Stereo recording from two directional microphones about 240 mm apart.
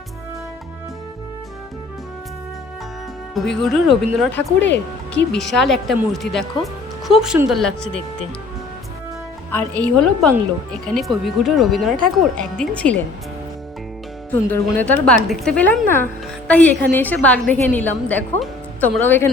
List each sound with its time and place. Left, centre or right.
3.3 s speech: centre
4.6 s speech: left
5.3 s speech: centre
9.5 s speech: centre
14.5 s a woman's voice: centre